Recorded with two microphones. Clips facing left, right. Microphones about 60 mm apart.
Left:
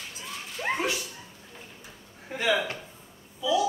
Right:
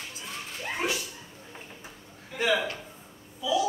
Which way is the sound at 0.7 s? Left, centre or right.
Left.